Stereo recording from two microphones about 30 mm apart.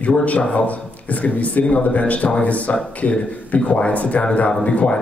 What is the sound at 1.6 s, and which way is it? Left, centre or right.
Speech, left.